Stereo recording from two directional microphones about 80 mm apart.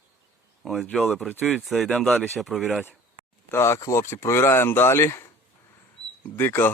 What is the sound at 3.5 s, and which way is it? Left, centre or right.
Speech, left.